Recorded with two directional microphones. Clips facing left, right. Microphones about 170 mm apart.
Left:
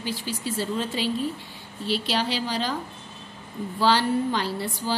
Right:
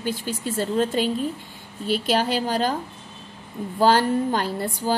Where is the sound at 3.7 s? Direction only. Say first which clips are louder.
Right 3 dB; 50° right (ahead or behind).